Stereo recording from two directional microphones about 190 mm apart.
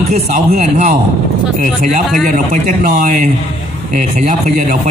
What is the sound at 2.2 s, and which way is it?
Speech, 45° right (ahead or behind).